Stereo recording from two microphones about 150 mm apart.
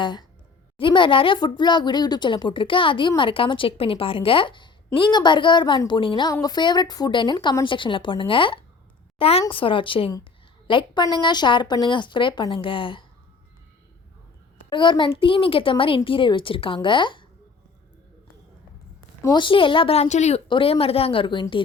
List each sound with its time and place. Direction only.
0.0 s a woman's voice: 30° left (ahead or behind)
14.7 s a child's voice: 30° left (ahead or behind)
19.2 s a child's voice: 30° left (ahead or behind); by 20.4 s 50° left (ahead or behind)
20.5 s a child's voice: 40° left (ahead or behind)